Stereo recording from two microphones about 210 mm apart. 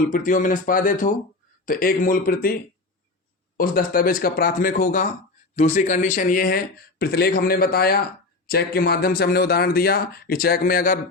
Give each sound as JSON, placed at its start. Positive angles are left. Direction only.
{"t": 0.1, "sound": "speech", "side_deg": 40}
{"t": 3.6, "sound": "speech", "side_deg": 40}